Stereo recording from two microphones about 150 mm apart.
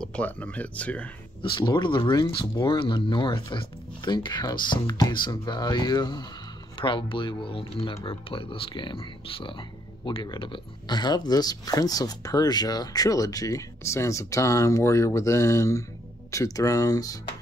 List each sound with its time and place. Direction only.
0.0 s speech: 10° left (ahead or behind)
1.4 s speech: 30° left (ahead or behind)